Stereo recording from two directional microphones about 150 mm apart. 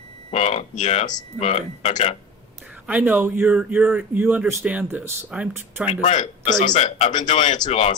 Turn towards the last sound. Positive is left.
turn(degrees=45)  # may be behind; listen again after turning